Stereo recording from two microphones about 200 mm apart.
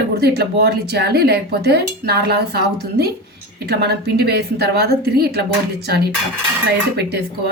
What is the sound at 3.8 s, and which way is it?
A woman's voice, 55° right (ahead or behind).